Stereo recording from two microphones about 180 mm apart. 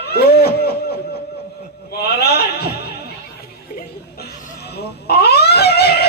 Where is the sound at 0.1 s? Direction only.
60° left (ahead or behind).